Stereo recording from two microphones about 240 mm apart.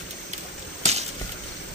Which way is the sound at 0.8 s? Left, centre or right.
Right.